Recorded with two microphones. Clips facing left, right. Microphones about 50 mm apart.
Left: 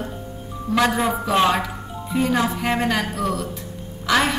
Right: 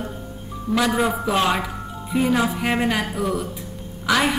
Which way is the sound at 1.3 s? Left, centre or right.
Centre.